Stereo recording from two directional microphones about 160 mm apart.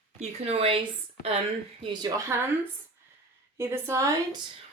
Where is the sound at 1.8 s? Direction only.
25° right (ahead or behind).